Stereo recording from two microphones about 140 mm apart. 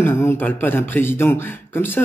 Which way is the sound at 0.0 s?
15° left (ahead or behind).